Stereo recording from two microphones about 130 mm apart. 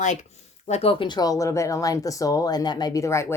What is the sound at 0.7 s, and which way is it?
Speech, 50° left (ahead or behind).